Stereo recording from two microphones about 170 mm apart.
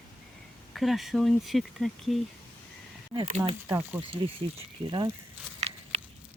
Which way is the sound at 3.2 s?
40° right (ahead or behind).